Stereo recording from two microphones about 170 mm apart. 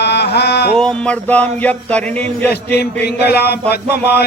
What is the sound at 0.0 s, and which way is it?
Music, 80° left.